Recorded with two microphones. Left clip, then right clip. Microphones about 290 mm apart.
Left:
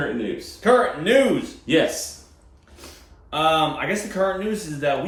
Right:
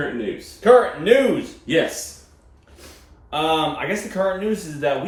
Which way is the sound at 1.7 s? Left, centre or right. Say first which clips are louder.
Even; centre.